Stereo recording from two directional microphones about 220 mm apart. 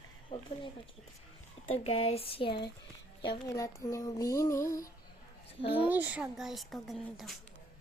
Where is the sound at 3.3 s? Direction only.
15° left (ahead or behind).